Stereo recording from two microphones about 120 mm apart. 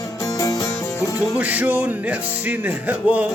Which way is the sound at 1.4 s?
15° right (ahead or behind).